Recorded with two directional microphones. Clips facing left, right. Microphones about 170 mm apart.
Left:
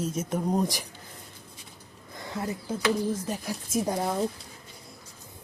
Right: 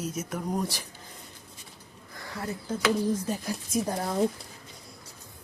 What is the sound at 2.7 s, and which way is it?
Speech, centre (ahead or behind).